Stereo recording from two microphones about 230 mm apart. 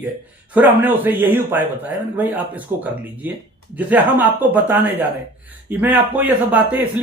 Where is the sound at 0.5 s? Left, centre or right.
Centre.